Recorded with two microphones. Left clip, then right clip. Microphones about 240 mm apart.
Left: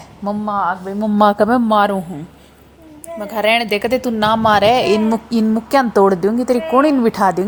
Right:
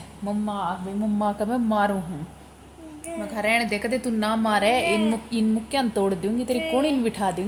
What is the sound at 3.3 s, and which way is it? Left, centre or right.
Speech, left.